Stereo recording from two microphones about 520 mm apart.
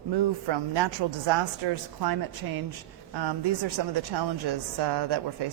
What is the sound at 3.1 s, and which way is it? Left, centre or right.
Speech, right.